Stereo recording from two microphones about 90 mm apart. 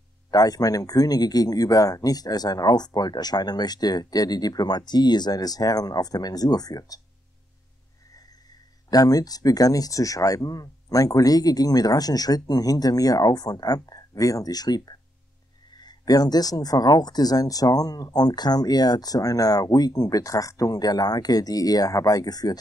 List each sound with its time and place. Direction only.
0.3 s speech: 45° left (ahead or behind)
8.9 s speech: 45° left (ahead or behind)